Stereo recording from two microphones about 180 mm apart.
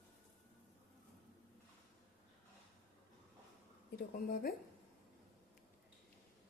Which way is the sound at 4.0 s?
55° left (ahead or behind).